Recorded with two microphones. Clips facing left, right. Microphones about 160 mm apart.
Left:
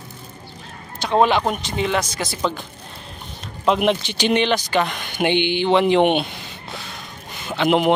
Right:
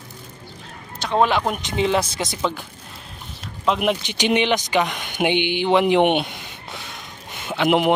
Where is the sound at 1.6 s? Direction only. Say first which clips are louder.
Right 2 dB; 20° right (ahead or behind).